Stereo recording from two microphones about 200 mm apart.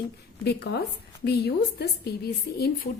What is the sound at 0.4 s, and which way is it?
A woman's voice, 55° left (ahead or behind).